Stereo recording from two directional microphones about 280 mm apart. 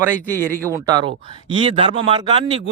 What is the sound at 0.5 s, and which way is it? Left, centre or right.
Speech, centre.